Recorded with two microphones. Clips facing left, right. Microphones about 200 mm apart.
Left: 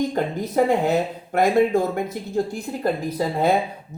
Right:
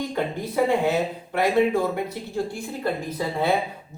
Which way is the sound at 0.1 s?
45° left (ahead or behind).